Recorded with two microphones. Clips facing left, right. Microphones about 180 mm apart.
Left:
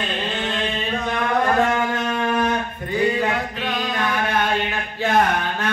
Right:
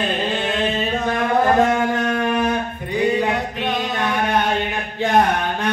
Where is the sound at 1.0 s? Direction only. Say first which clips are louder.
Right 3 dB; 15° right (ahead or behind).